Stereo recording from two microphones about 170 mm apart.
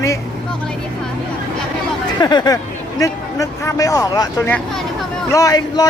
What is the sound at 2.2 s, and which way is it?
Speech, 25° left (ahead or behind).